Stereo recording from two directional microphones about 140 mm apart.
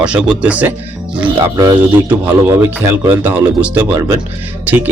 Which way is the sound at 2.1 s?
15° right (ahead or behind).